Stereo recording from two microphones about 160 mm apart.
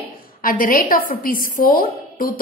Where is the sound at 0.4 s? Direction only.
60° left (ahead or behind).